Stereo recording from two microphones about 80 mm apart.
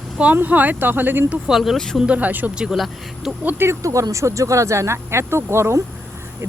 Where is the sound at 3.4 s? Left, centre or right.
Right.